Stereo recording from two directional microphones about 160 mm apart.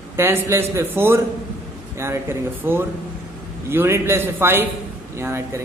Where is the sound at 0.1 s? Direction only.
15° right (ahead or behind).